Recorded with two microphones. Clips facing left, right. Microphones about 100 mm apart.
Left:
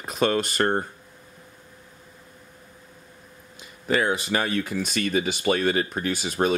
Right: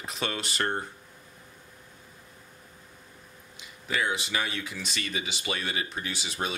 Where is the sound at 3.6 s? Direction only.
45° left (ahead or behind).